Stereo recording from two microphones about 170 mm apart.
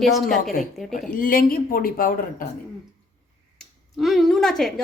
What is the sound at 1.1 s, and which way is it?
Speech, 55° left (ahead or behind).